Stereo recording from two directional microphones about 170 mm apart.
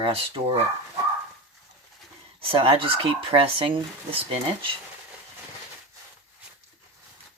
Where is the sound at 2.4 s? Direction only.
30° right (ahead or behind).